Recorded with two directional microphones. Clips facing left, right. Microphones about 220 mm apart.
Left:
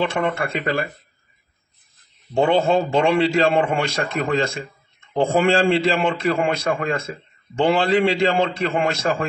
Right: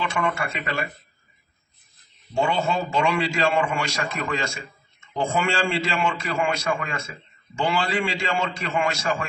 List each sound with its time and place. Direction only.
0.0 s a man's voice: 55° left (ahead or behind)
2.3 s a man's voice: 55° left (ahead or behind)